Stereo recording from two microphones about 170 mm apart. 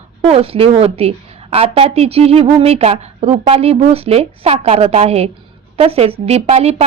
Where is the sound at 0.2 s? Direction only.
35° right (ahead or behind).